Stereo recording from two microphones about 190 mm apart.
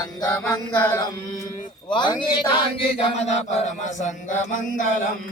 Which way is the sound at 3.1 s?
35° left (ahead or behind).